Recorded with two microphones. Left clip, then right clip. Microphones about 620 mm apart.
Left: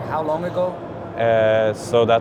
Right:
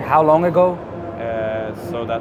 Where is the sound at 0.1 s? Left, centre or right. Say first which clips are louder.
Right 10 dB; right.